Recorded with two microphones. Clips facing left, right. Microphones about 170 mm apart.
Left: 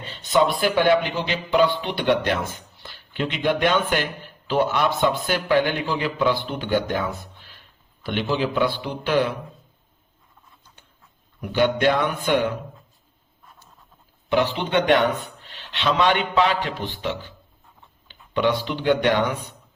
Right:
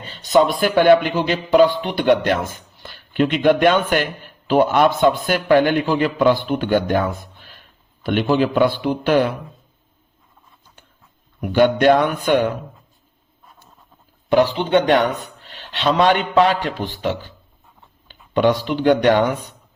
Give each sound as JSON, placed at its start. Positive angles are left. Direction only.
{"t": 0.2, "sound": "a man's voice", "side_deg": -40}
{"t": 11.3, "sound": "a man's voice", "side_deg": -50}
{"t": 14.3, "sound": "a man's voice", "side_deg": -40}